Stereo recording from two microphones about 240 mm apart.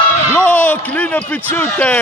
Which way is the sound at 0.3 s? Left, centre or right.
Centre.